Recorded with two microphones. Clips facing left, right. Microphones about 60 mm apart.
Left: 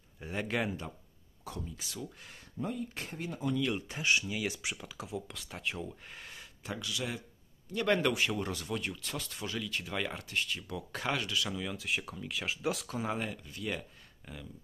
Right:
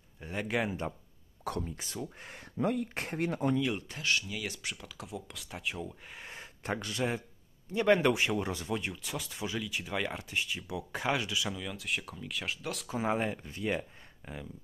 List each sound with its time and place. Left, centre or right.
0.3 s speech: centre
1.6 s speech: right
2.5 s speech: right
2.9 s speech: right
3.9 s speech: centre
6.2 s a sound: right
6.6 s speech: right
7.7 s speech: centre
9.0 s speech: centre
11.5 s speech: centre
12.9 s speech: right